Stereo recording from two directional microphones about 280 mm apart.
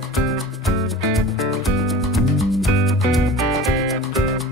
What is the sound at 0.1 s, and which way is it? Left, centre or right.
Music, centre.